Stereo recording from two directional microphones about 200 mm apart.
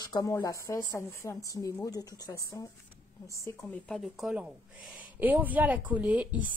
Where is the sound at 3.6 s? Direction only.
Centre (ahead or behind).